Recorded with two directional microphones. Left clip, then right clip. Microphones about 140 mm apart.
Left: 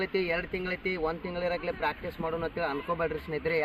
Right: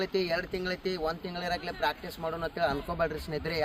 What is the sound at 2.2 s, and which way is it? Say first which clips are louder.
Speech: right 2 dB; 50° right (ahead or behind).